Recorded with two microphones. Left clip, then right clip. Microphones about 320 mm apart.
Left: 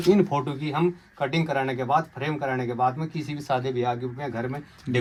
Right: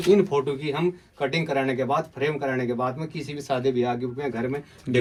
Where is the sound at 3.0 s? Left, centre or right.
Centre.